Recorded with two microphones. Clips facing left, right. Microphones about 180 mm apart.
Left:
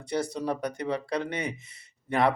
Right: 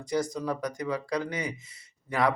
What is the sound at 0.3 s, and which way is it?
Speech, 30° left (ahead or behind).